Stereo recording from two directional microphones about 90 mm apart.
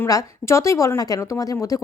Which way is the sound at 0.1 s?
35° left (ahead or behind).